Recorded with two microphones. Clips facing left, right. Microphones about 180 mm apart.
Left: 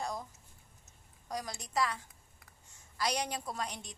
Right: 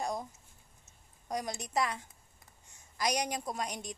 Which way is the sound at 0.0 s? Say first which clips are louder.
Right 3 dB; 20° right (ahead or behind).